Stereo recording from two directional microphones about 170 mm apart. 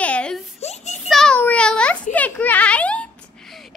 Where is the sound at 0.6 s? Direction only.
40° left (ahead or behind).